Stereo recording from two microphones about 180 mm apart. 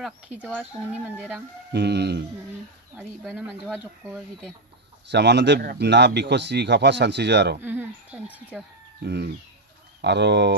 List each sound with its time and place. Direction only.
0.0 s speech: 10° right (ahead or behind)
1.7 s a man's voice: 65° right (ahead or behind)
3.0 s speech: centre (ahead or behind)
5.1 s a man's voice: 70° right (ahead or behind)
7.6 s speech: 10° right (ahead or behind)
9.0 s a man's voice: 65° right (ahead or behind)